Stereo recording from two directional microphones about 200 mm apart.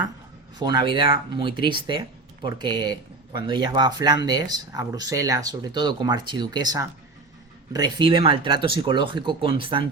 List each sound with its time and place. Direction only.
0.6 s speech: 20° right (ahead or behind)